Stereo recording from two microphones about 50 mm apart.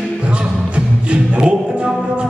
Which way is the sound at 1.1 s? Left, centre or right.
Right.